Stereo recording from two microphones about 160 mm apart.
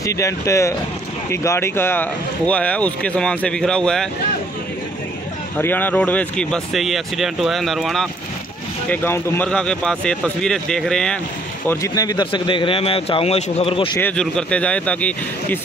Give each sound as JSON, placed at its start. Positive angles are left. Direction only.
{"t": 0.0, "sound": "speech", "side_deg": 20}
{"t": 5.6, "sound": "speech", "side_deg": 10}
{"t": 8.9, "sound": "speech", "side_deg": 10}
{"t": 11.6, "sound": "speech", "side_deg": 15}
{"t": 14.1, "sound": "speech", "side_deg": 5}